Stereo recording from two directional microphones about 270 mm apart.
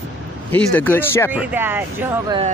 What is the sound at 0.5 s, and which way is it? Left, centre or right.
Speech, centre.